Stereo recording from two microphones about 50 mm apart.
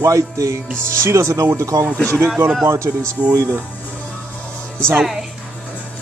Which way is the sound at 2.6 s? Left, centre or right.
Right.